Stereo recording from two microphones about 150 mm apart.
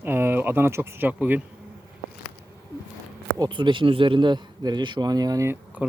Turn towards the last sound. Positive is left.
turn(degrees=-10)  # may be behind; listen again after turning